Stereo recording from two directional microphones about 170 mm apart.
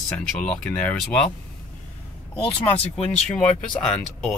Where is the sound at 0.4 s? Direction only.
5° left (ahead or behind).